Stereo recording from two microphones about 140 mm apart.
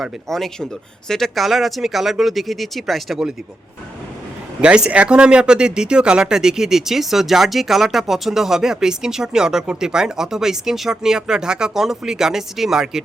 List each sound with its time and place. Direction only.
0.0 s speech: centre (ahead or behind)
4.6 s speech: 5° right (ahead or behind)